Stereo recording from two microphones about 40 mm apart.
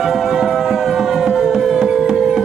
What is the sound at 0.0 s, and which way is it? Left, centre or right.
Music, centre.